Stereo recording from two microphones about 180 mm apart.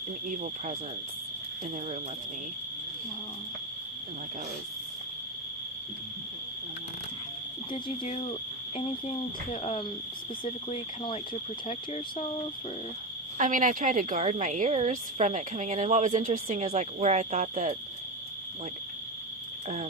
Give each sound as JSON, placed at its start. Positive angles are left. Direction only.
{"t": 0.3, "sound": "speech", "side_deg": -45}
{"t": 7.7, "sound": "speech", "side_deg": 30}
{"t": 13.4, "sound": "a woman's voice", "side_deg": -45}
{"t": 19.6, "sound": "speech", "side_deg": -40}